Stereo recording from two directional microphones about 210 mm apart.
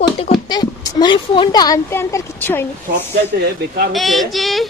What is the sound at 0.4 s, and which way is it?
Speech, 20° left (ahead or behind).